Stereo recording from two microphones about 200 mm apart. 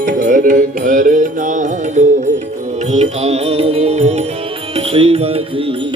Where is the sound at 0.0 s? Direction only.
40° right (ahead or behind).